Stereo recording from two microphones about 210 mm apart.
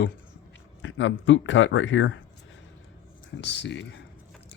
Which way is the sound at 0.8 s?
65° left (ahead or behind).